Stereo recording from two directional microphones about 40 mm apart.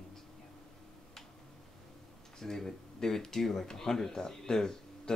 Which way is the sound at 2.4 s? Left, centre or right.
Centre.